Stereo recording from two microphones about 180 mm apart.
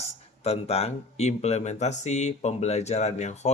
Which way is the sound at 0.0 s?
35° left (ahead or behind).